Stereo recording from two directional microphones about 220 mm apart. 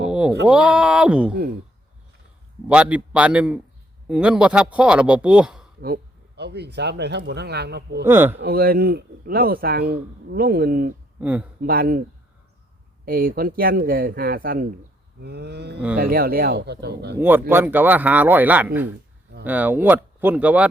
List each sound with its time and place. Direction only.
0.0 s a sound: 5° right (ahead or behind)
0.4 s speech: 5° right (ahead or behind)
2.6 s speech: 5° right (ahead or behind)
5.8 s speech: 45° right (ahead or behind)
8.0 s speech: 10° right (ahead or behind)
8.4 s speech: 45° right (ahead or behind)
11.2 s speech: 5° right (ahead or behind)
11.6 s speech: 40° right (ahead or behind)
13.1 s speech: 40° right (ahead or behind)
17.2 s speech: 10° right (ahead or behind)